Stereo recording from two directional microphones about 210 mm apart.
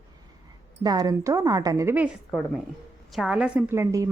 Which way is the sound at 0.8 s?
20° right (ahead or behind).